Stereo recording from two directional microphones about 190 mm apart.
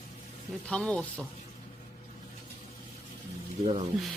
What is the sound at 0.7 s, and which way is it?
Speech, 5° left (ahead or behind).